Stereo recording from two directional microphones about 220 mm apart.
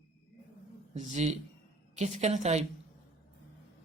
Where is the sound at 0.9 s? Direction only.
30° right (ahead or behind).